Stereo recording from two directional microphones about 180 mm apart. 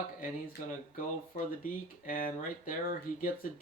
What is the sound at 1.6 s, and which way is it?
Speech, 50° left (ahead or behind).